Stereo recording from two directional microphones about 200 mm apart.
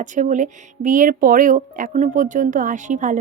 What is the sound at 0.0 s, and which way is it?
Speech, 40° right (ahead or behind).